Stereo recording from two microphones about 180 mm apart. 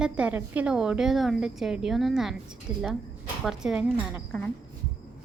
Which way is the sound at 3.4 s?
5° right (ahead or behind).